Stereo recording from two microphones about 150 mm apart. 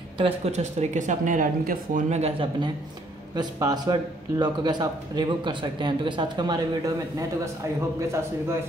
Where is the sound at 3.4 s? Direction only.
25° right (ahead or behind).